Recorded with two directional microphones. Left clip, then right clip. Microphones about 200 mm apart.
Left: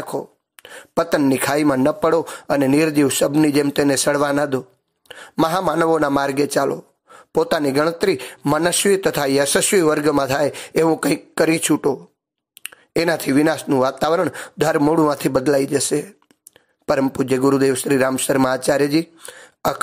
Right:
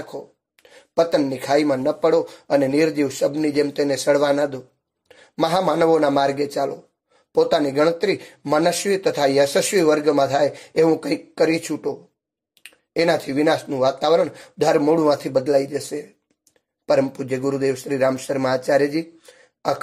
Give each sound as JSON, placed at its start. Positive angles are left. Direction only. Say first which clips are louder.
{"t": 0.1, "sound": "speech", "louder": "left 7 dB", "side_deg": 30}